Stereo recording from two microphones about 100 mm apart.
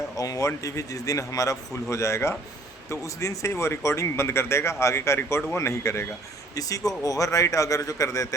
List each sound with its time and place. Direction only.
0.2 s a man's voice: 35° left (ahead or behind)
6.5 s a man's voice: 35° left (ahead or behind)